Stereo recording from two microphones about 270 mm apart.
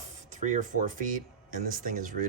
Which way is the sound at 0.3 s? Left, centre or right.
Right.